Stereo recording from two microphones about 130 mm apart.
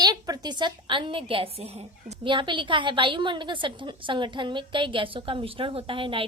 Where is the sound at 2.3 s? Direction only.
40° right (ahead or behind).